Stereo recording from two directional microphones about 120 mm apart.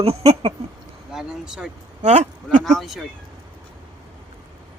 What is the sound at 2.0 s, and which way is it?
Speech, 70° right (ahead or behind).